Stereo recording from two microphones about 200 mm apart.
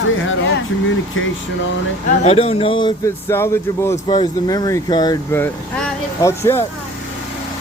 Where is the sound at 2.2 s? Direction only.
30° left (ahead or behind).